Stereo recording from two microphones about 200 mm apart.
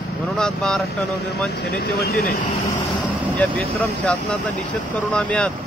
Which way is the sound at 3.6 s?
5° left (ahead or behind).